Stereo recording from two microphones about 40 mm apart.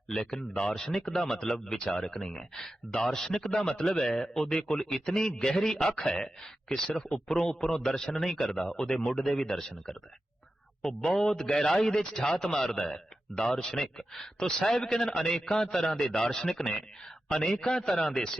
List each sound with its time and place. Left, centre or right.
0.1 s speech: centre
11.2 s a man's voice: centre